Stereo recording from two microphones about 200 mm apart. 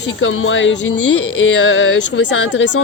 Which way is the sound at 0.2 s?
80° left.